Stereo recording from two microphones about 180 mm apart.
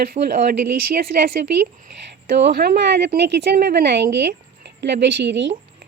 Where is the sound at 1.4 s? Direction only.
55° right (ahead or behind); by 5.5 s 80° right.